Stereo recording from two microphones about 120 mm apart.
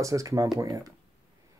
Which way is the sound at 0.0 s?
25° right (ahead or behind).